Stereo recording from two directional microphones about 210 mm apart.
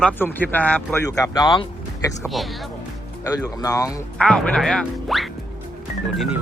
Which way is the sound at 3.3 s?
15° left (ahead or behind).